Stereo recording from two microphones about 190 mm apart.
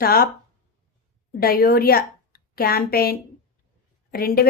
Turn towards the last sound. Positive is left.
turn(degrees=50)  # may be behind; listen again after turning